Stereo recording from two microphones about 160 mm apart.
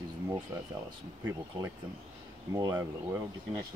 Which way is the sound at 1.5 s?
30° right (ahead or behind).